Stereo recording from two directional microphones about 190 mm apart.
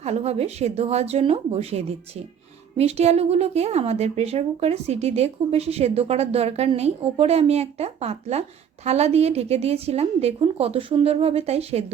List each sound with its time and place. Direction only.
0.0 s speech: 35° right (ahead or behind)